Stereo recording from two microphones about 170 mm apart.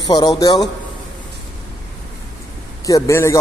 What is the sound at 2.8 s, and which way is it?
Speech, 20° left (ahead or behind).